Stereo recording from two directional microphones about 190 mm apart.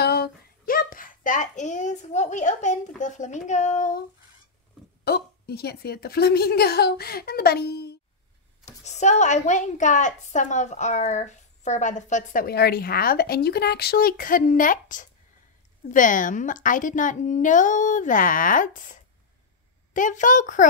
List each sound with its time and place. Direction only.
0.0 s a sound: 55° left (ahead or behind); by 2.8 s 40° left (ahead or behind)
3.0 s a woman's voice: 40° left (ahead or behind)
5.0 s a woman's voice: 55° left (ahead or behind)
8.6 s a woman's voice: 35° left (ahead or behind)